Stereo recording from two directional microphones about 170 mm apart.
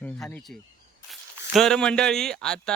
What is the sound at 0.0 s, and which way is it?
Speech, 10° left (ahead or behind).